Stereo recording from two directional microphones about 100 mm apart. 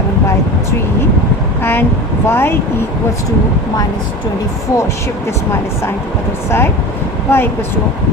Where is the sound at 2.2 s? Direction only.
25° left (ahead or behind).